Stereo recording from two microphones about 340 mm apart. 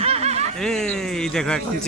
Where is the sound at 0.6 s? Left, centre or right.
Centre.